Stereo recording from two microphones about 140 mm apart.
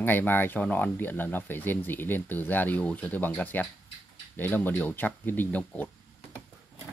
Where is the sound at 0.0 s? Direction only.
15° left (ahead or behind).